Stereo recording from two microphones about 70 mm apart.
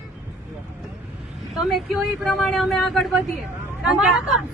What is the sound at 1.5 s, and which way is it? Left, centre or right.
Speech, centre.